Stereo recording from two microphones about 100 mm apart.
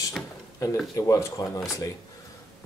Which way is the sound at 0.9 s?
35° left (ahead or behind).